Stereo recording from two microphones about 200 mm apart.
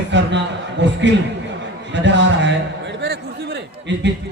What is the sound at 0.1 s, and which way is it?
A man's voice, 60° right (ahead or behind).